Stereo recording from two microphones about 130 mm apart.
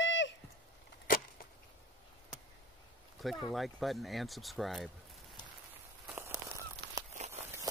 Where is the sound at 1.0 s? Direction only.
90° left.